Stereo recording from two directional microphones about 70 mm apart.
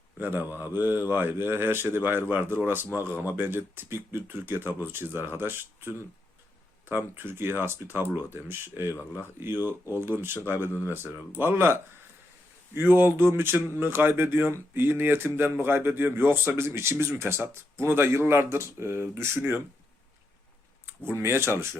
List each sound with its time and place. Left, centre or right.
0.2 s a man's voice: right
21.1 s a man's voice: right